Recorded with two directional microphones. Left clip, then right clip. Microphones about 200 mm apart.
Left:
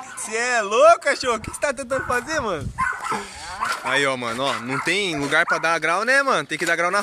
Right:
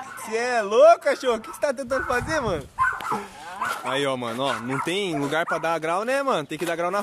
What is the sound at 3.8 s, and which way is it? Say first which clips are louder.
Speech: left 5 dB; 5° right (ahead or behind).